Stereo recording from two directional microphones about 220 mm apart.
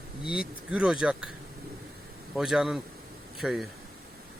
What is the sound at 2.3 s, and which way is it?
Speech, 5° right (ahead or behind).